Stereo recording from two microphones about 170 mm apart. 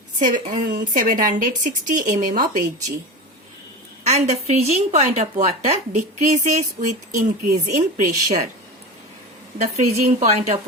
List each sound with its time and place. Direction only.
0.2 s a woman's voice: 50° right (ahead or behind)
4.0 s a woman's voice: 40° right (ahead or behind)
9.6 s a woman's voice: 40° right (ahead or behind)